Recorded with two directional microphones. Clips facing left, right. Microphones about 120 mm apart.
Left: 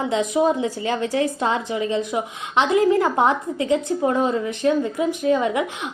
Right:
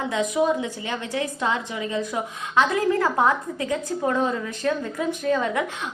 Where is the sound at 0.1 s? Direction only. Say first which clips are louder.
Left 2 dB; 30° left (ahead or behind).